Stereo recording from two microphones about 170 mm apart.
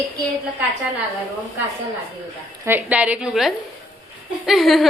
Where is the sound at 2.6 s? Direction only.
10° right (ahead or behind).